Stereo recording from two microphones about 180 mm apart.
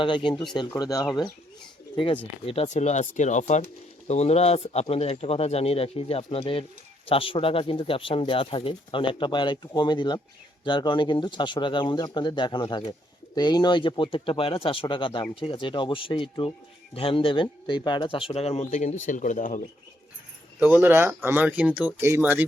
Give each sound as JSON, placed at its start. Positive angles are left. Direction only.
{"t": 0.0, "sound": "speech", "side_deg": 25}
{"t": 2.5, "sound": "speech", "side_deg": 35}
{"t": 20.6, "sound": "speech", "side_deg": -10}